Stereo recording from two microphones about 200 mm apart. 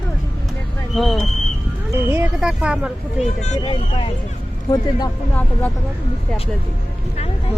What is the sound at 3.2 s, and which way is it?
Speech, 35° left (ahead or behind).